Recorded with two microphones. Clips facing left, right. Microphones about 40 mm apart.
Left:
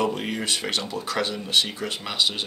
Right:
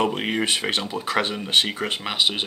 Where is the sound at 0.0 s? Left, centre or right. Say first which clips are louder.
Right 3 dB; right.